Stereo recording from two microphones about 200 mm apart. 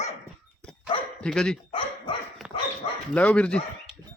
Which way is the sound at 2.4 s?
5° right (ahead or behind).